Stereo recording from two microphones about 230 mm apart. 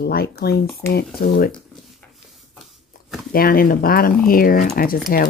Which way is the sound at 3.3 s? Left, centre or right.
Left.